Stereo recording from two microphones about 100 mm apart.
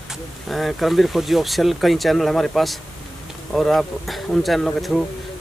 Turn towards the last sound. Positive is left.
turn(degrees=5)  # may be behind; listen again after turning